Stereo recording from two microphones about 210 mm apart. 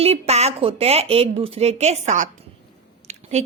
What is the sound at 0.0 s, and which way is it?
Speech, 30° right (ahead or behind).